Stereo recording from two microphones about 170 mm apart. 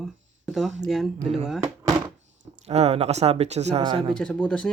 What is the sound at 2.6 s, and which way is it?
Speech, 40° right (ahead or behind).